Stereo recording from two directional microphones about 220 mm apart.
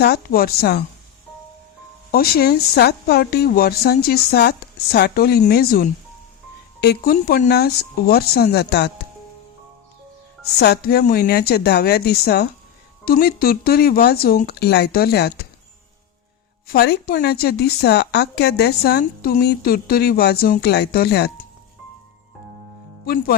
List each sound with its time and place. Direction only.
0.0 s speech: 45° left (ahead or behind)
2.1 s speech: 45° left (ahead or behind)
10.6 s speech: 45° left (ahead or behind)
16.6 s speech: 45° left (ahead or behind)
23.0 s speech: 40° left (ahead or behind)